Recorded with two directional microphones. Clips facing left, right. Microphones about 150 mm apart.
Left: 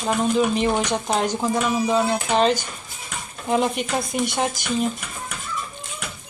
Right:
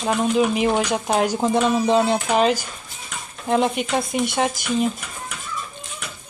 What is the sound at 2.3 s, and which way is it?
Speech, 5° right (ahead or behind).